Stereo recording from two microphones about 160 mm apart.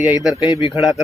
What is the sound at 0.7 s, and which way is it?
Speech, centre (ahead or behind).